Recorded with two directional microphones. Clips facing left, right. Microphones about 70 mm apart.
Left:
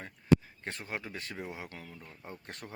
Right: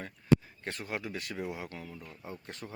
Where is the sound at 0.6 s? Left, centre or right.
Left.